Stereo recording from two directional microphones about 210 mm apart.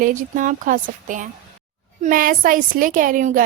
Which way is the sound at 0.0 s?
40° right (ahead or behind).